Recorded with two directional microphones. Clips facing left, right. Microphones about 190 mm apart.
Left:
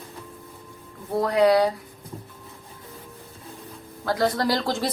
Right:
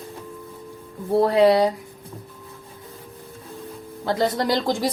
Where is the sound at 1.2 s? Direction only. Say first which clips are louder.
Right 2 dB; 25° right (ahead or behind).